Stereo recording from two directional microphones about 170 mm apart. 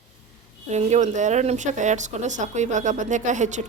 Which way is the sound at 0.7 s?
45° right (ahead or behind).